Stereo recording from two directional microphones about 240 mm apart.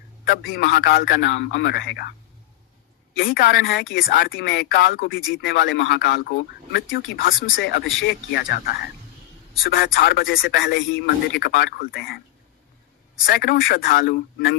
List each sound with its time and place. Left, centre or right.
0.3 s a man's voice: left
3.2 s speech: left
4.0 s speech: left
13.2 s speech: left